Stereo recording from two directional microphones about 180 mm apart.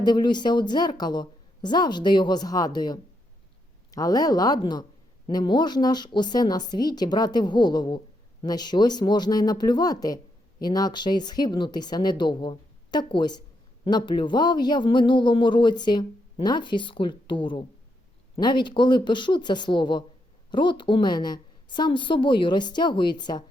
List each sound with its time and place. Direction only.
0.0 s speech: 25° left (ahead or behind)